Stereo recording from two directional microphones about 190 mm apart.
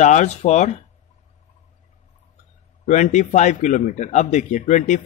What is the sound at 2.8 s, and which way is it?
Speech, 40° left (ahead or behind).